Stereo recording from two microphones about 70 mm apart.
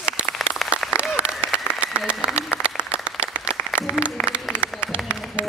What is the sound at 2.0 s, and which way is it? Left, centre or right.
Applause, centre.